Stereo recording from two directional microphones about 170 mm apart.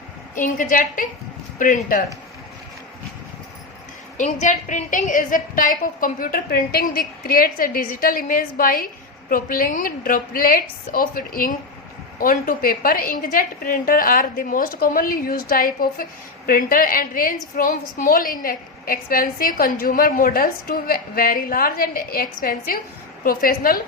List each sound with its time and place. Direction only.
0.3 s a woman's voice: 50° left (ahead or behind)
4.2 s a woman's voice: 45° left (ahead or behind)